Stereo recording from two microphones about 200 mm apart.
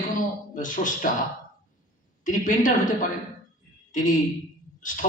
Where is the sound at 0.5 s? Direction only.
40° left (ahead or behind).